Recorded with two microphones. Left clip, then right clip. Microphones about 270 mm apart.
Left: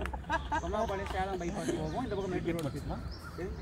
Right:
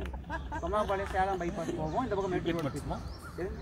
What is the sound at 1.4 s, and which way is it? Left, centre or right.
Speech, centre.